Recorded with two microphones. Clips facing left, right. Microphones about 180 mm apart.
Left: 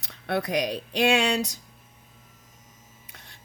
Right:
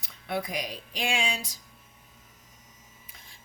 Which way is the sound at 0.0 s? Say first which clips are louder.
Left 4 dB; 70° left (ahead or behind).